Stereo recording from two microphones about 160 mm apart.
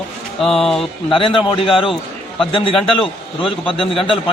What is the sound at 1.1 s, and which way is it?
A man's voice, 35° left (ahead or behind).